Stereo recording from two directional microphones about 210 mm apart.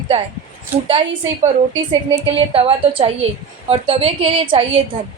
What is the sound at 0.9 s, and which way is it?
Speech, 25° right (ahead or behind).